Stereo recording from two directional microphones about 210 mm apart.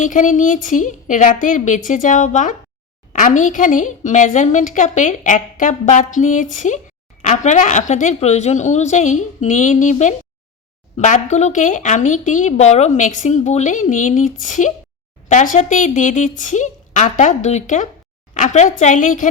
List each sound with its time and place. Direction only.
0.0 s speech: 35° left (ahead or behind)